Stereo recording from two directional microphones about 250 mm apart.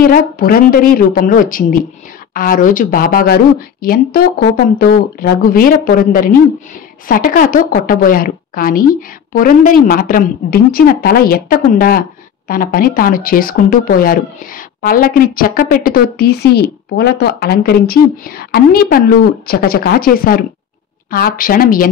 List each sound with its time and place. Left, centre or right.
0.0 s speech: left